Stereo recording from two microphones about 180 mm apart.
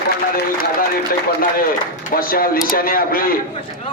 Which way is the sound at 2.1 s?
55° left (ahead or behind).